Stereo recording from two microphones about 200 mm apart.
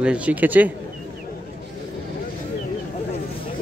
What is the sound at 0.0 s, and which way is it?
Speech, 5° right (ahead or behind).